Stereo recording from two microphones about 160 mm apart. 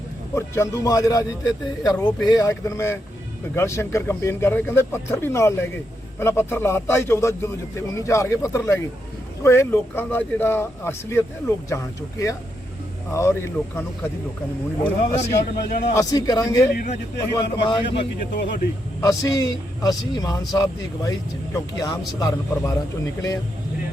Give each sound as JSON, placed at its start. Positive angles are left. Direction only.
{"t": 0.3, "sound": "speech", "side_deg": 20}
{"t": 16.7, "sound": "speech", "side_deg": 55}
{"t": 17.6, "sound": "speech", "side_deg": 30}
{"t": 17.9, "sound": "speech", "side_deg": 90}
{"t": 19.0, "sound": "speech", "side_deg": 20}